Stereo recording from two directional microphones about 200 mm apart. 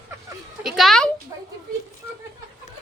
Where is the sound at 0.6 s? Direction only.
Centre (ahead or behind).